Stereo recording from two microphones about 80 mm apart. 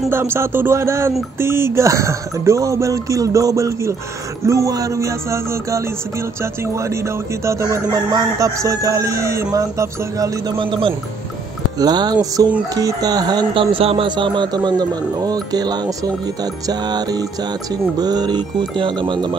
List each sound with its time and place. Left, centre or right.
0.1 s speech: right
8.1 s speech: right
8.6 s music: right
10.6 s speech: right
11.8 s speech: right
16.6 s music: right
17.9 s mantra: right